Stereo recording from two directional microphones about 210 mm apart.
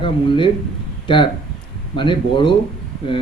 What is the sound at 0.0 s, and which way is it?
Speech, 25° left (ahead or behind).